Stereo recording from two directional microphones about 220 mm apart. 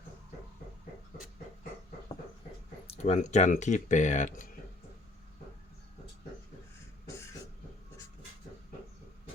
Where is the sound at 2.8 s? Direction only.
25° left (ahead or behind).